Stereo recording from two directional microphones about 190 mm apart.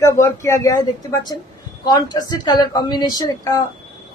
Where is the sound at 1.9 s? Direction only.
20° left (ahead or behind).